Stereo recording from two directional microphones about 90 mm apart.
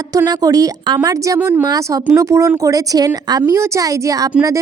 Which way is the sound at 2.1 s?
35° right (ahead or behind).